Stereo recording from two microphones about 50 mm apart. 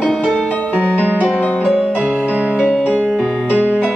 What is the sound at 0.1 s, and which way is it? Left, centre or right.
Music, centre.